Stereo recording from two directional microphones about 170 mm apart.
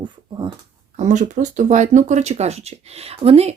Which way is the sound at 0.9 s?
45° right (ahead or behind).